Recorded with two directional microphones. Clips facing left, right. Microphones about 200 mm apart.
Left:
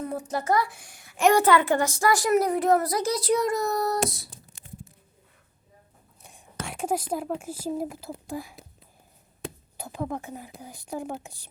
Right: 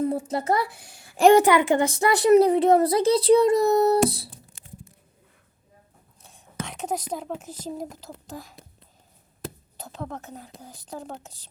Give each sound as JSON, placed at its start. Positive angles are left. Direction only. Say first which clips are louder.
{"t": 0.0, "sound": "a woman's voice", "louder": "right 5 dB", "side_deg": -25}
{"t": 1.4, "sound": "speech", "louder": "right 2 dB", "side_deg": -15}
{"t": 2.3, "sound": "a child's voice", "louder": "right 8 dB", "side_deg": -30}
{"t": 6.2, "sound": "a woman's voice", "louder": "right 2 dB", "side_deg": 10}